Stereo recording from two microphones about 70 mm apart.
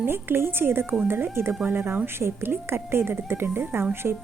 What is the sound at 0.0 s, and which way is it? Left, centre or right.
A woman's voice, right.